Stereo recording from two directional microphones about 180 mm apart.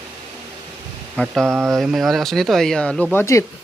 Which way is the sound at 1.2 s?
10° left (ahead or behind).